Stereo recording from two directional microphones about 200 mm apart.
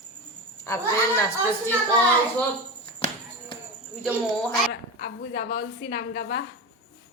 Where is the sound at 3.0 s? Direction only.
30° left (ahead or behind).